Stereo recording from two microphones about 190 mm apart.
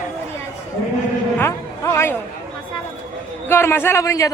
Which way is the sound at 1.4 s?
15° left (ahead or behind).